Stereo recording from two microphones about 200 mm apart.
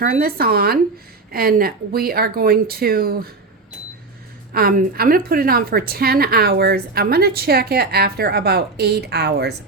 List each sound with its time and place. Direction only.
0.0 s a woman's voice: 50° right (ahead or behind)
4.5 s a woman's voice: 50° right (ahead or behind)